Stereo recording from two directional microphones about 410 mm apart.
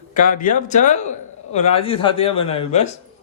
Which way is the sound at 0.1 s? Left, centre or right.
Centre.